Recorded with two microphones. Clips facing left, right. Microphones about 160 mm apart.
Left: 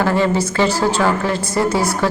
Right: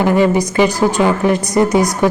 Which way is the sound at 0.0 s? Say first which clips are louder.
Right 4 dB; 15° right (ahead or behind).